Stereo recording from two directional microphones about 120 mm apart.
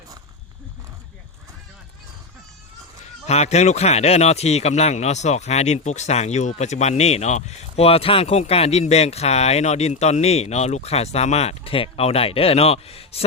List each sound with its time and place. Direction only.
3.2 s speech: 65° left (ahead or behind)